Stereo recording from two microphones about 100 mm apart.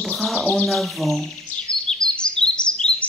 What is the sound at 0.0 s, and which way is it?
Bird, centre (ahead or behind).